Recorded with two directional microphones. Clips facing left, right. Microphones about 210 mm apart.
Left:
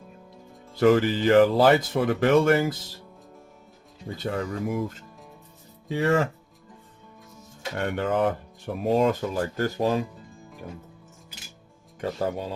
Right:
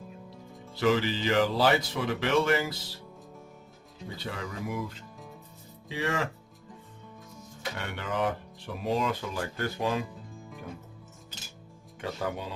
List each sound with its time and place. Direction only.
0.8 s speech: 50° left (ahead or behind)
4.2 s speech: 45° left (ahead or behind)
7.8 s speech: 50° left (ahead or behind)
11.9 s speech: 40° left (ahead or behind)